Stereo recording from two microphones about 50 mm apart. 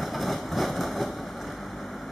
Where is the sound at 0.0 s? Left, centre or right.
Centre.